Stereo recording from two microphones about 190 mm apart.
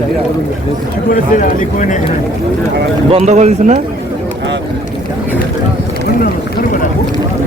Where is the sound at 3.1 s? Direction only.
35° right (ahead or behind).